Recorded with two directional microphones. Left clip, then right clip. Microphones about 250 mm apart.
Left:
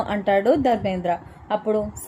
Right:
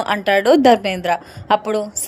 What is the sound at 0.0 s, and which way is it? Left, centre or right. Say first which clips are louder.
A woman's voice: right 4 dB; right.